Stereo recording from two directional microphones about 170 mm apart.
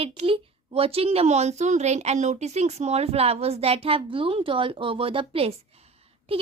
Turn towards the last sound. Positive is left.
turn(degrees=-35)  # may be behind; listen again after turning